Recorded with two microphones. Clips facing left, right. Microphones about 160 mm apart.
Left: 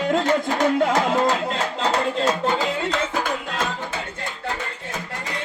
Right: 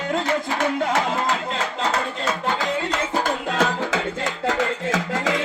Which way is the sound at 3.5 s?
90° right.